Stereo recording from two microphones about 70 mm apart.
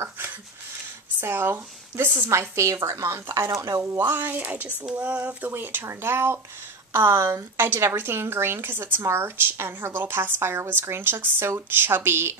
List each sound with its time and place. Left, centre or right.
1.2 s a woman's voice: right
3.5 s speech: right
4.0 s a woman's voice: right